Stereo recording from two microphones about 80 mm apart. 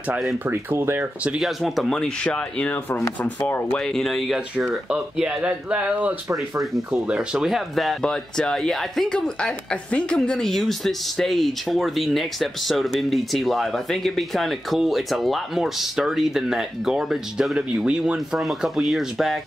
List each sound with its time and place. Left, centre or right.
0.5 s speech: right
1.4 s speech: centre
2.0 s speech: centre
3.8 s speech: centre
4.6 s speech: centre
6.6 s speech: centre